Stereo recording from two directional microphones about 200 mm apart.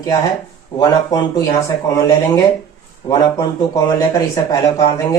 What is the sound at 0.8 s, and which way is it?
Speech, 20° left (ahead or behind).